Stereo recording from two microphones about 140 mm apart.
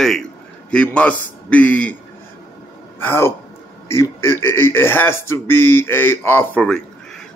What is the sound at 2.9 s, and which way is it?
A man's voice, 15° left (ahead or behind).